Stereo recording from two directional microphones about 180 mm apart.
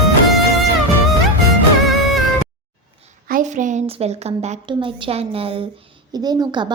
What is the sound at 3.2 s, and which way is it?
A woman's voice, 45° right (ahead or behind).